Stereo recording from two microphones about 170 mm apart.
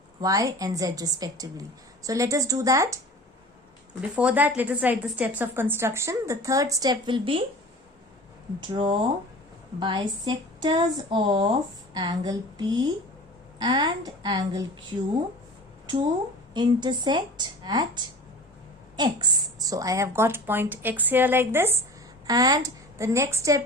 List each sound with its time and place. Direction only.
0.2 s a woman's voice: 20° right (ahead or behind)
4.1 s a woman's voice: 5° right (ahead or behind); by 7.4 s 30° right (ahead or behind)
8.6 s a woman's voice: 30° right (ahead or behind)
16.6 s a woman's voice: 25° right (ahead or behind)